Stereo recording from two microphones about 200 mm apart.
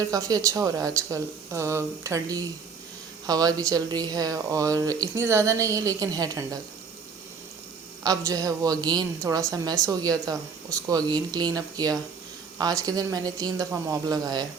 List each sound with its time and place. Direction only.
0.0 s a woman's voice: 15° right (ahead or behind)
8.0 s a woman's voice: 15° right (ahead or behind)